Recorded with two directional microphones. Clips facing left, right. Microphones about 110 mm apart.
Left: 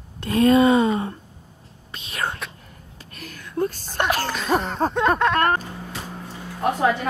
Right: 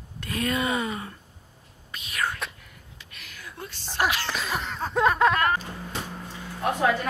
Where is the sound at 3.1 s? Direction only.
40° left (ahead or behind).